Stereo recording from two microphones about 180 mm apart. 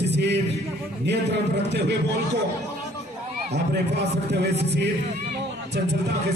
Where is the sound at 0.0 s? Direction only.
75° right (ahead or behind).